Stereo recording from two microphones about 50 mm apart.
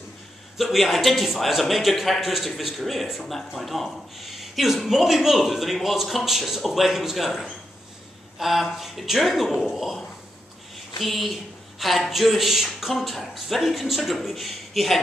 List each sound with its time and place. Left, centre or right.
0.6 s a man's voice: centre